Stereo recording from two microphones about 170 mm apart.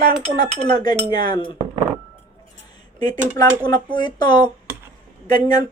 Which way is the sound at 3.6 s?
25° left (ahead or behind).